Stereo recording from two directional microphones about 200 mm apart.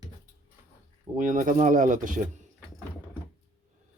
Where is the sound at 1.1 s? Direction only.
40° right (ahead or behind).